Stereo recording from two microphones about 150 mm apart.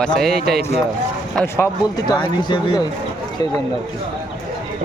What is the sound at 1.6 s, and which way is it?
Speech, 25° left (ahead or behind).